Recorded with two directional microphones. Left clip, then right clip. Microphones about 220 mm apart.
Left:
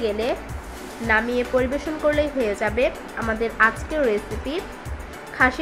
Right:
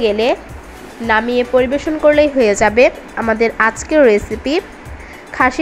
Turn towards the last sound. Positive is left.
turn(degrees=-30)  # may be behind; listen again after turning